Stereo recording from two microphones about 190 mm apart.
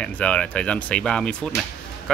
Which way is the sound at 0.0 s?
5° left (ahead or behind).